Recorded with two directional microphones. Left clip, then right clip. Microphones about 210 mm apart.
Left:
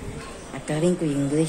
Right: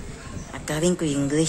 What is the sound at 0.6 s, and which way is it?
Speech, 20° right (ahead or behind).